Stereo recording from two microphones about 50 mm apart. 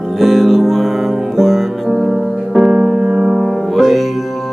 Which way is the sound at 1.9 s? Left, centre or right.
Centre.